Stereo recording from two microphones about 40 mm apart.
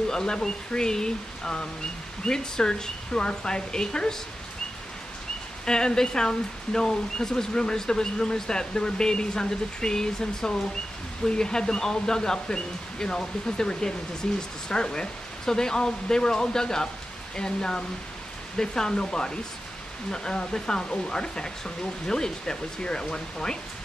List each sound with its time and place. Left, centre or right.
0.1 s speech: centre
5.7 s speech: centre